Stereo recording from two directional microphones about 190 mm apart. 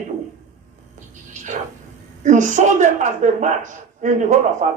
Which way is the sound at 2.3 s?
40° right (ahead or behind).